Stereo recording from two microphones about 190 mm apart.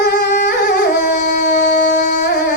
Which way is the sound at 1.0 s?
60° left (ahead or behind).